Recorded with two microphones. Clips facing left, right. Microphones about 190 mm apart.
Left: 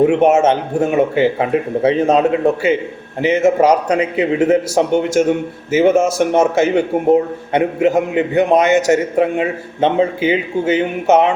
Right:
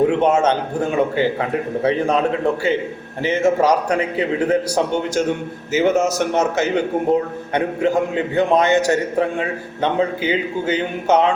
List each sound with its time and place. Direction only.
0.1 s a man's voice: 25° left (ahead or behind)